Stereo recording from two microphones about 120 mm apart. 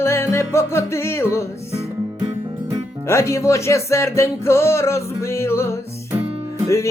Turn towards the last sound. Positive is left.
turn(degrees=25)  # may be behind; listen again after turning